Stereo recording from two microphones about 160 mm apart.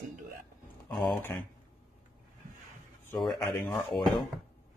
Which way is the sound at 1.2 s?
10° left (ahead or behind).